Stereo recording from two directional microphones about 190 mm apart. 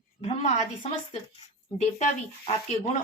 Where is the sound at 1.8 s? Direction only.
35° left (ahead or behind).